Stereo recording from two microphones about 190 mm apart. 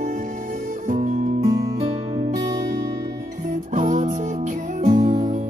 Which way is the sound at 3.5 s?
40° right (ahead or behind).